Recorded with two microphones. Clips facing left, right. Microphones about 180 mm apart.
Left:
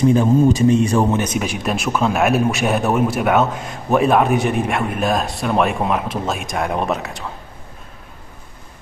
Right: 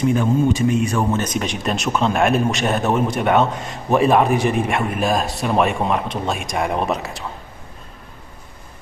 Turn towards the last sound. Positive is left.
turn(degrees=0)  # may be behind; listen again after turning